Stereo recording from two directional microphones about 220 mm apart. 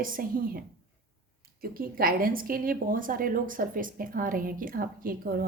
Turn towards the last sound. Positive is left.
turn(degrees=-40)  # may be behind; listen again after turning